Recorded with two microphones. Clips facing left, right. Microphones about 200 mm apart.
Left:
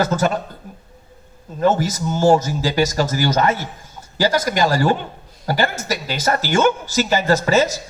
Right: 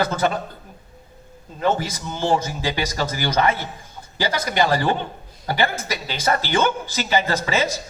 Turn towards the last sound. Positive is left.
turn(degrees=45)  # may be behind; listen again after turning